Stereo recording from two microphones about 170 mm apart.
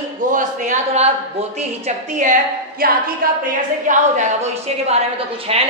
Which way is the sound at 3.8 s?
45° right (ahead or behind).